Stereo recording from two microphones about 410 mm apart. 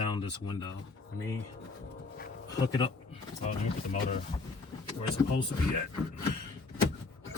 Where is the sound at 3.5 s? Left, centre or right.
Centre.